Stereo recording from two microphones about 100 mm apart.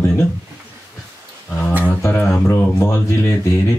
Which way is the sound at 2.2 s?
25° left (ahead or behind).